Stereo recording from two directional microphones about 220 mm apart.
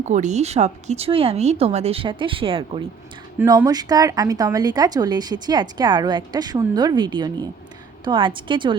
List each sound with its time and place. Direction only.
0.0 s speech: 35° right (ahead or behind)